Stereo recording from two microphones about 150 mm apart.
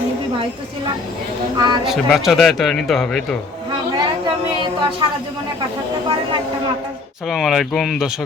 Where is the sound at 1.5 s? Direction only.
30° right (ahead or behind).